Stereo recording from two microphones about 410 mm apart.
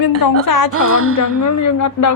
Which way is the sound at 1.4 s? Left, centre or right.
Left.